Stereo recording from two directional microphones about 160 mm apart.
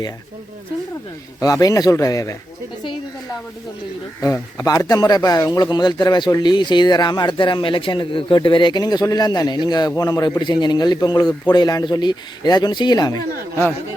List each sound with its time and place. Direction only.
1.4 s speech: 20° left (ahead or behind)
4.5 s speech: 20° left (ahead or behind)